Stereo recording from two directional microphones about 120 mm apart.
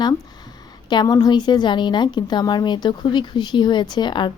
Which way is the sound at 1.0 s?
35° left (ahead or behind).